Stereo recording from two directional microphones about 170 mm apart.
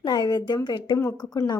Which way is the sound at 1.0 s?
15° left (ahead or behind).